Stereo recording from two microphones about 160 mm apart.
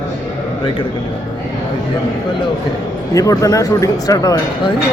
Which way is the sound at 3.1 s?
20° left (ahead or behind).